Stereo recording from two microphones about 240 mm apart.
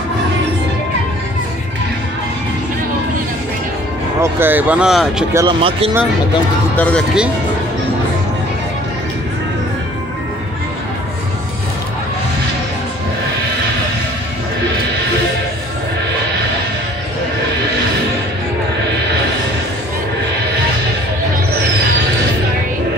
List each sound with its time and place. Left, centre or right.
4.2 s speech: centre
5.4 s speech: right
6.8 s speech: centre